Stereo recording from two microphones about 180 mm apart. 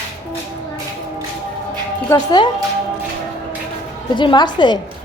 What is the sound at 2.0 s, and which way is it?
Speech, 20° left (ahead or behind).